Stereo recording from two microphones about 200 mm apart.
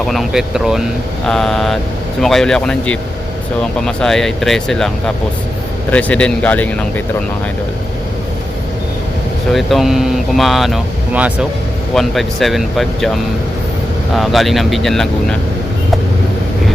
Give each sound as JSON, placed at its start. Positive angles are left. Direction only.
{"t": 0.1, "sound": "speech", "side_deg": 0}
{"t": 9.5, "sound": "speech", "side_deg": 0}
{"t": 14.2, "sound": "speech", "side_deg": 0}